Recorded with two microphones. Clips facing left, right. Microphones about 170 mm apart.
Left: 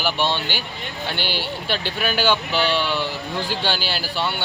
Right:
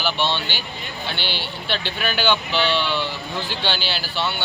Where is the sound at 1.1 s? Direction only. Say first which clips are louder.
Left 3 dB; 45° left (ahead or behind).